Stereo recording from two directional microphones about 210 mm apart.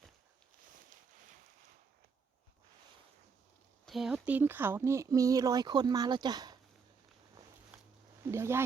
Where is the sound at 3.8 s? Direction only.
Centre (ahead or behind); by 6.6 s 20° right (ahead or behind).